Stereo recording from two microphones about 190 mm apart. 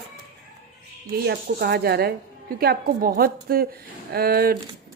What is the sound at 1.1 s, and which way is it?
A woman's voice, 55° right (ahead or behind).